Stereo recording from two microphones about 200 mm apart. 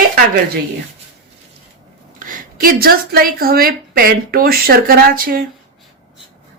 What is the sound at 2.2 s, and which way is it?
A woman's voice, 45° right (ahead or behind).